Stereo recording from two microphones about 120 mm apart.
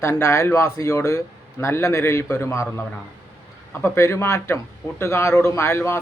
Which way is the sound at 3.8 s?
20° left (ahead or behind).